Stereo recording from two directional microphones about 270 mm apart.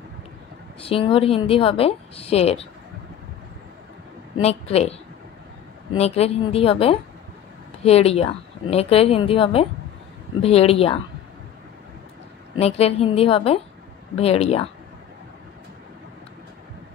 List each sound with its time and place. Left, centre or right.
0.7 s a woman's voice: left
4.4 s a woman's voice: left
5.9 s a woman's voice: left
12.5 s a woman's voice: left